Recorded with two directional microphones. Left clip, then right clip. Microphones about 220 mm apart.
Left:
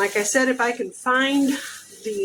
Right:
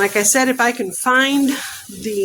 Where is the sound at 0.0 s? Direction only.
45° right (ahead or behind).